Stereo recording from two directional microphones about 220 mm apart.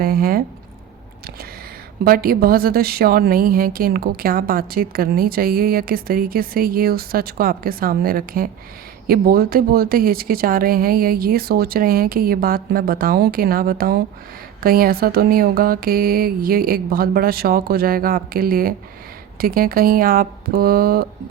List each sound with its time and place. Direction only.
0.0 s a woman's voice: 40° right (ahead or behind)
2.0 s a woman's voice: 40° right (ahead or behind)